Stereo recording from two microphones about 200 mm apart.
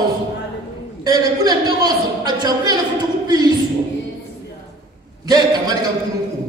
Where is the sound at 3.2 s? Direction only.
20° right (ahead or behind).